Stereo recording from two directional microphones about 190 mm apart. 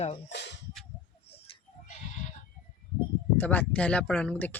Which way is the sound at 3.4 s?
10° left (ahead or behind).